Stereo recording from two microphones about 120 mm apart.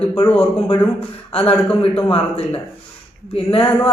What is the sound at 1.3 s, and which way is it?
Speech, 55° left (ahead or behind).